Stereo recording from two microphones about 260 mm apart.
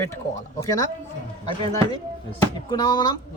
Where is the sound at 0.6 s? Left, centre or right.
Centre.